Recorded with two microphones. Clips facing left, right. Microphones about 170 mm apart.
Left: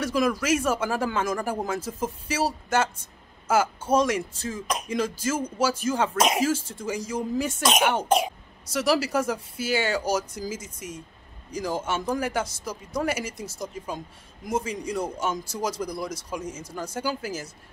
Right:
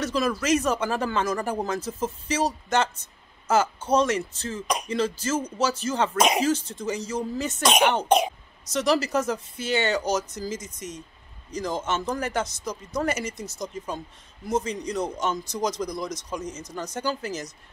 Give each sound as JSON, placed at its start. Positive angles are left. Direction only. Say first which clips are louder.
{"t": 0.0, "sound": "speech", "louder": "left 1 dB", "side_deg": 10}